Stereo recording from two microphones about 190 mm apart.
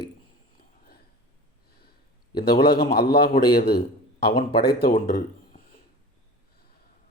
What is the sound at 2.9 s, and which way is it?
A man's voice, 55° left (ahead or behind).